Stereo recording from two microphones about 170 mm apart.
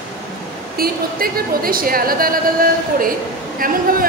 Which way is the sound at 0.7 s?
60° right (ahead or behind).